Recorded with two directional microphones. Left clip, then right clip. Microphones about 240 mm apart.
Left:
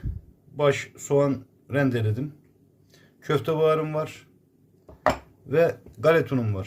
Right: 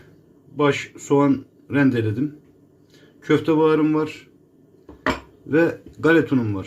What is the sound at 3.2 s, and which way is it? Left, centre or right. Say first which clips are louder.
Speech: right 5 dB; left.